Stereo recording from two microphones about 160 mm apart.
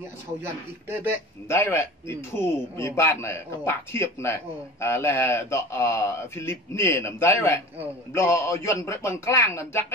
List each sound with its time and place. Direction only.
1.5 s a man's voice: 15° left (ahead or behind)